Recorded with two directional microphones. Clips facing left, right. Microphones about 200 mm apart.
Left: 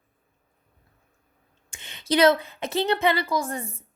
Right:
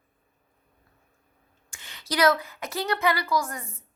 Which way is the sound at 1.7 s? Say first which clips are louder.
Left 8 dB; 20° left (ahead or behind).